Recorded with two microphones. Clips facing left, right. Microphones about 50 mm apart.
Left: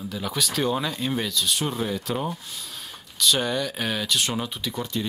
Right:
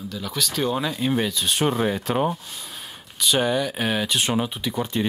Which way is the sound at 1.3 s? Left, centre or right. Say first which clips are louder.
Right 1 dB; right.